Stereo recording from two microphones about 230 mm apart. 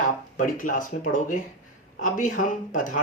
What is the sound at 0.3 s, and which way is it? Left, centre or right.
Speech, left.